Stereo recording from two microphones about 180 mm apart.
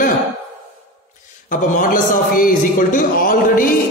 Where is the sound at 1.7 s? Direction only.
50° left (ahead or behind).